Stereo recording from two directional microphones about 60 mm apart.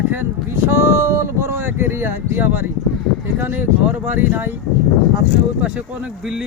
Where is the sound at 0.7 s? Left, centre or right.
Right.